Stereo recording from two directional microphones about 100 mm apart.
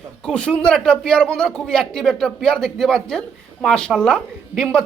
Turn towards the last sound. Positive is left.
turn(degrees=10)  # may be behind; listen again after turning